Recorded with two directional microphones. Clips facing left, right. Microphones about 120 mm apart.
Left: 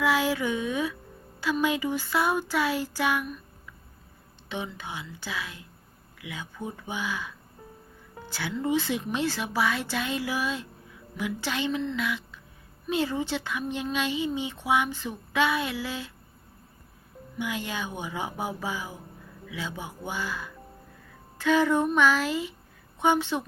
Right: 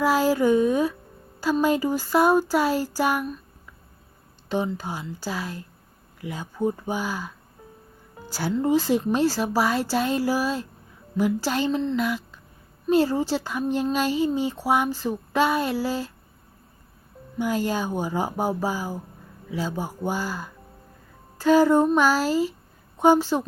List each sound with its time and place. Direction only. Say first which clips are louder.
0.0 s speech: right 5 dB; 40° right (ahead or behind)
4.4 s speech: right 9 dB; 40° right (ahead or behind)
17.3 s speech: right 8 dB; 40° right (ahead or behind)